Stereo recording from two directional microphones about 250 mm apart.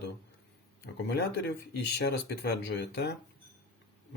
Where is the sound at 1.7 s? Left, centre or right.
Left.